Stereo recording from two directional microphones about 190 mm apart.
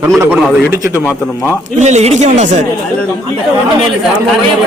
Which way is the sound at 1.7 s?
35° right (ahead or behind).